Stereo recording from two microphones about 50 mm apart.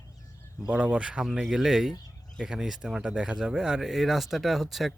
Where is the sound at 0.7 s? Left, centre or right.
Right.